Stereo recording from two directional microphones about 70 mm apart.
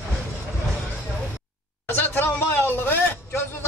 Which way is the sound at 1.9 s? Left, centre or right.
Left.